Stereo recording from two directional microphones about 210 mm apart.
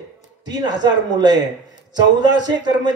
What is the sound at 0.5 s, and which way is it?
Speech, 20° right (ahead or behind).